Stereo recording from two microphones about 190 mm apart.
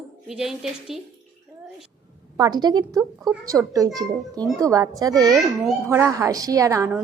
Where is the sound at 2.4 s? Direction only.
20° right (ahead or behind).